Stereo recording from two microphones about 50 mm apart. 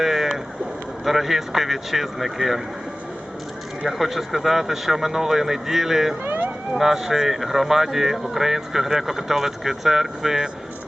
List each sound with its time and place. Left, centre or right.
0.0 s rowboat: centre
1.0 s speech: centre
3.8 s speech: centre
6.2 s emergency vehicle: right
6.7 s speech: centre